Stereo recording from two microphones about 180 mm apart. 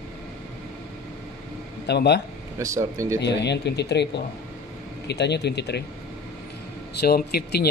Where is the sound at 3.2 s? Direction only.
70° left (ahead or behind).